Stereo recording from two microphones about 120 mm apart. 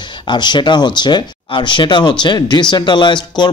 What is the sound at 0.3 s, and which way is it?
Speech, 40° left (ahead or behind).